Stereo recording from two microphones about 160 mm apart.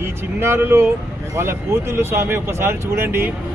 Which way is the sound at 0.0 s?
15° right (ahead or behind).